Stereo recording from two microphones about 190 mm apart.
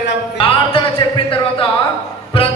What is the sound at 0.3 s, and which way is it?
Music, 30° left (ahead or behind).